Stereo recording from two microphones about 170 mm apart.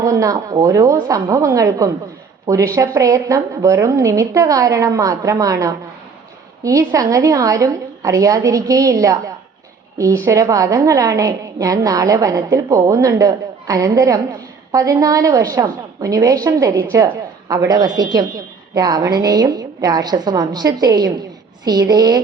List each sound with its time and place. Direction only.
0.0 s a woman's voice: 20° right (ahead or behind)